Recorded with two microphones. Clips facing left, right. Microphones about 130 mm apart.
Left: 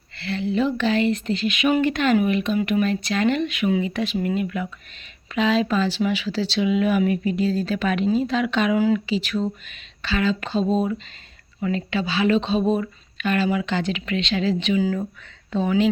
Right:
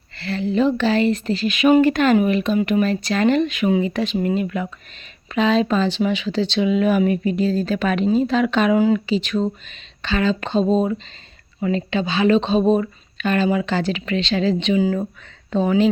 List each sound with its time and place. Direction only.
0.2 s a woman's voice: 40° right (ahead or behind)
6.6 s a woman's voice: 35° right (ahead or behind)